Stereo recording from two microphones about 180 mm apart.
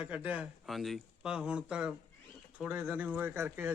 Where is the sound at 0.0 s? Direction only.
5° right (ahead or behind).